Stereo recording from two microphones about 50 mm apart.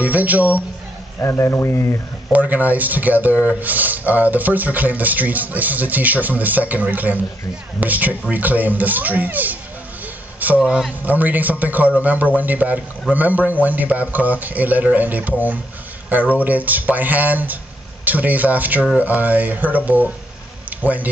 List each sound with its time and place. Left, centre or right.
0.0 s speech: right
1.4 s speech: left
2.3 s speech: right